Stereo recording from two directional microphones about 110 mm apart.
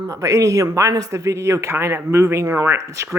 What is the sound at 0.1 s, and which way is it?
Speech, 30° right (ahead or behind).